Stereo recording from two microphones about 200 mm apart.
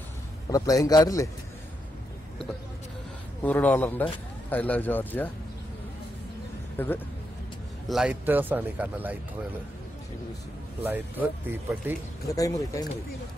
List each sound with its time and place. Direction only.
0.5 s speech: 15° left (ahead or behind)
3.4 s speech: 10° left (ahead or behind)
6.8 s speech: 10° left (ahead or behind)
7.9 s speech: 5° right (ahead or behind)
10.8 s speech: 10° right (ahead or behind)
12.3 s speech: 15° left (ahead or behind)